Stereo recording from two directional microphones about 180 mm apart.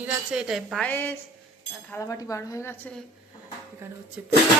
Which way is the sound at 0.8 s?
10° left (ahead or behind).